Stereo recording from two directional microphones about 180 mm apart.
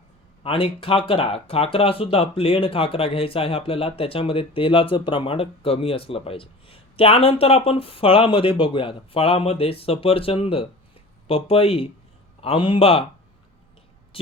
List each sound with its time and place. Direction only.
0.4 s a man's voice: 30° left (ahead or behind)